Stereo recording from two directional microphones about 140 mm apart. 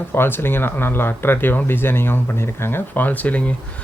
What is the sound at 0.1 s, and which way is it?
Speech, 15° left (ahead or behind).